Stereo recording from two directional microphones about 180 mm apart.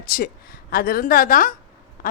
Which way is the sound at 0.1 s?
55° left (ahead or behind).